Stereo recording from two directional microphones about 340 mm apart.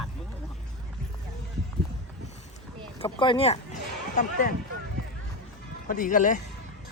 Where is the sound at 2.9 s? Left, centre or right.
Centre.